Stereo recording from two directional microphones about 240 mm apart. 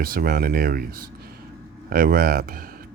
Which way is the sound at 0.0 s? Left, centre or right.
Right.